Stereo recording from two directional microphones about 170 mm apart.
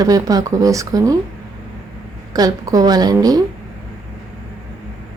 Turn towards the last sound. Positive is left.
turn(degrees=-20)  # may be behind; listen again after turning